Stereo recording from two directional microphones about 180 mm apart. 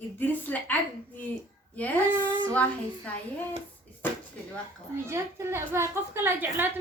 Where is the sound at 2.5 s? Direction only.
5° left (ahead or behind).